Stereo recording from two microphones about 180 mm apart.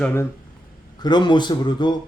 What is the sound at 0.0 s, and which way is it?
Speech, 15° left (ahead or behind).